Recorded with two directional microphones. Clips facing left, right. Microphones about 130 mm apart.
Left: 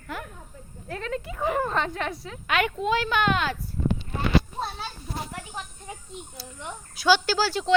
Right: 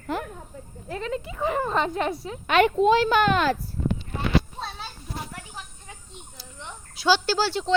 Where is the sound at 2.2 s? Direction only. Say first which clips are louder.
Right 6 dB; 30° right (ahead or behind).